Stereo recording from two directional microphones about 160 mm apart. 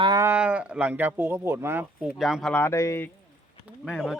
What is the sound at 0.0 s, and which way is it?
Speech, 20° right (ahead or behind).